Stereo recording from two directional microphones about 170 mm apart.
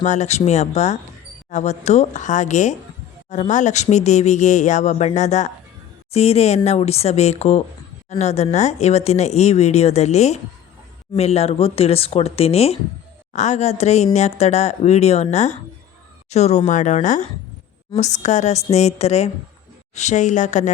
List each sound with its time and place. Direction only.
0.0 s speech: 45° left (ahead or behind)